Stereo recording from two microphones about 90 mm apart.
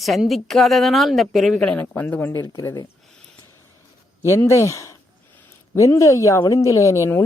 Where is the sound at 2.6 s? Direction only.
40° left (ahead or behind).